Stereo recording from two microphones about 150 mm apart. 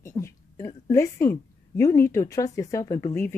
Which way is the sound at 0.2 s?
25° left (ahead or behind).